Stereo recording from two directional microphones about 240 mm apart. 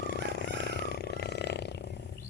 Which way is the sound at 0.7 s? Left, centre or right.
Left.